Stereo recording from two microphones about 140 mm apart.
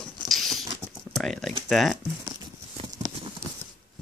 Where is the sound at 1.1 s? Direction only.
5° left (ahead or behind).